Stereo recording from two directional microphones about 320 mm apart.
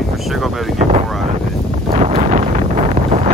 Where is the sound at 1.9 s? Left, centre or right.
Right.